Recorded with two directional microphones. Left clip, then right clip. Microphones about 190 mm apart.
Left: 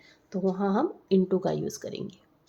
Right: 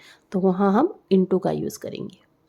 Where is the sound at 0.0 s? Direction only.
50° right (ahead or behind); by 2.2 s 25° right (ahead or behind).